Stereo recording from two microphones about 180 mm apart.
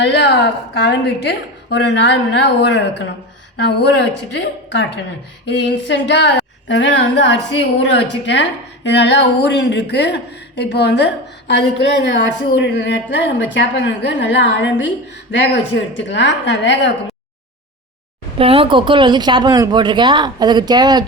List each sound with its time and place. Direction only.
0.0 s a woman's voice: 75° left (ahead or behind)
18.3 s speech: 30° right (ahead or behind)